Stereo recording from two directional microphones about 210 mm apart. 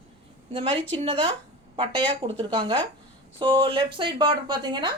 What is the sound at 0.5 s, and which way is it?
Speech, 25° right (ahead or behind).